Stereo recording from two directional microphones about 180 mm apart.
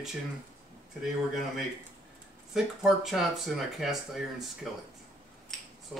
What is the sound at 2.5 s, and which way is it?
Speech, centre (ahead or behind).